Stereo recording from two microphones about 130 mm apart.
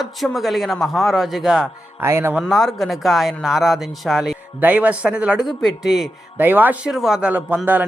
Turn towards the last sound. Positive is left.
turn(degrees=-10)  # may be behind; listen again after turning